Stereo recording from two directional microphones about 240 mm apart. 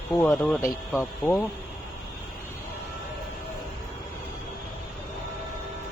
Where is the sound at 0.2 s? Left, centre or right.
Centre.